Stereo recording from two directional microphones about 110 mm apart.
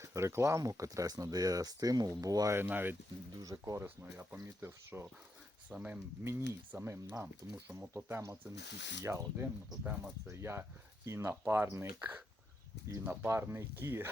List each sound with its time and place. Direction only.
0.0 s speech: 25° right (ahead or behind)
2.6 s speech: 20° right (ahead or behind)
3.4 s speech: 30° right (ahead or behind)
5.7 s speech: 10° right (ahead or behind)
6.2 s speech: 25° right (ahead or behind)